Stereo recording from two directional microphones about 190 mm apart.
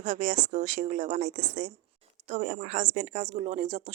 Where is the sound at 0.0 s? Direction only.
40° right (ahead or behind).